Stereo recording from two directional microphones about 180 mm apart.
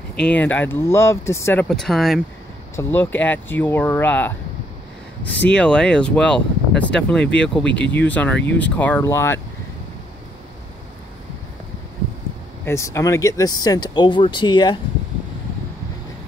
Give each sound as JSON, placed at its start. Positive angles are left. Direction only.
{"t": 0.2, "sound": "speech", "side_deg": 10}
{"t": 2.7, "sound": "speech", "side_deg": 15}
{"t": 12.6, "sound": "speech", "side_deg": 15}